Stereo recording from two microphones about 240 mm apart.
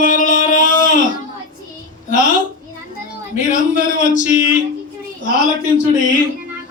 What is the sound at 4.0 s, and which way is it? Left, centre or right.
Speech, left.